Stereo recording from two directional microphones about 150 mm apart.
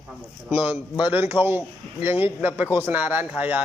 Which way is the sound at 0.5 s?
10° right (ahead or behind).